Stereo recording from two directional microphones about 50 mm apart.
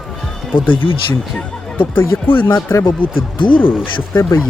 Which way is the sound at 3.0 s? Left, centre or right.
Left.